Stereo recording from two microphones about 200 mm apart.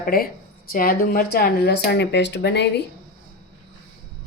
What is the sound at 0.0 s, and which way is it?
Speech, 45° left (ahead or behind).